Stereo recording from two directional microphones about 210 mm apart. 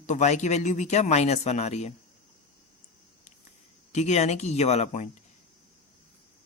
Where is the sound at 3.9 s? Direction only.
35° left (ahead or behind).